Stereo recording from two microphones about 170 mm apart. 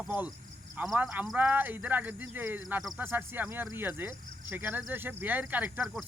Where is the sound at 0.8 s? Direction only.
5° right (ahead or behind).